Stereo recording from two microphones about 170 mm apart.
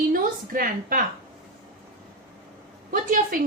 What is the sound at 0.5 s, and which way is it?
Speech, 55° right (ahead or behind).